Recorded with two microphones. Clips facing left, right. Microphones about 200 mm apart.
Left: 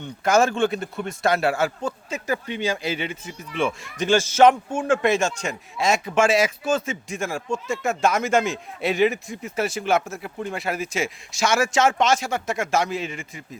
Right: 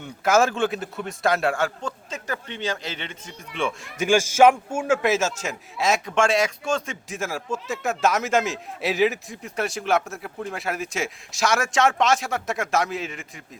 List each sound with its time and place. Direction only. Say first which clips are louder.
0.0 s a man's voice: left 1 dB; centre (ahead or behind)
4.0 s a man's voice: even; 10° right (ahead or behind)